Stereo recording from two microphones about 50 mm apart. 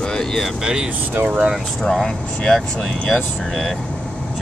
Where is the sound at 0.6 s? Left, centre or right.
Centre.